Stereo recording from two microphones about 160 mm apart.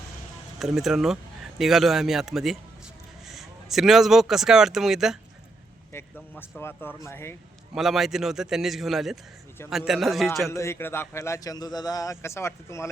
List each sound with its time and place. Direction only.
0.6 s a man's voice: centre (ahead or behind)
5.9 s a man's voice: 10° left (ahead or behind)
7.7 s a man's voice: centre (ahead or behind)
10.5 s a man's voice: 15° left (ahead or behind)